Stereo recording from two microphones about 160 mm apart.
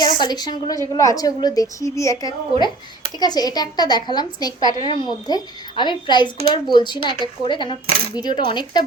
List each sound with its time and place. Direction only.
0.0 s a woman's voice: 25° left (ahead or behind)